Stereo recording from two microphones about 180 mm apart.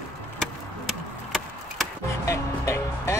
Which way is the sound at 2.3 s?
15° left (ahead or behind).